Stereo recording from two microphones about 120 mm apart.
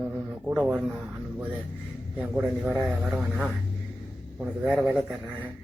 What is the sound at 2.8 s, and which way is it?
Speech, 5° right (ahead or behind).